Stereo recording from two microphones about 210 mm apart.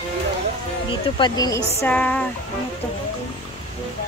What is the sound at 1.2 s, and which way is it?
A woman's voice, 20° left (ahead or behind).